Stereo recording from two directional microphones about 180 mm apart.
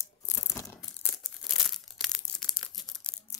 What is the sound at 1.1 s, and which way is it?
Crumpling, centre (ahead or behind).